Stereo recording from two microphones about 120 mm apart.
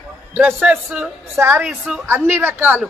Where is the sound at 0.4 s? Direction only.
10° right (ahead or behind).